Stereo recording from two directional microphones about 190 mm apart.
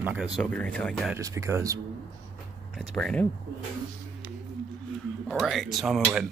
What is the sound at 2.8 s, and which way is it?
Speech, 5° left (ahead or behind).